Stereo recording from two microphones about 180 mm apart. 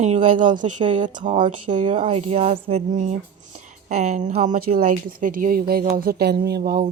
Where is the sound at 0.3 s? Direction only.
45° right (ahead or behind).